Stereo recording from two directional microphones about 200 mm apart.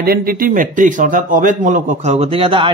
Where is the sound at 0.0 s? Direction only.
50° right (ahead or behind).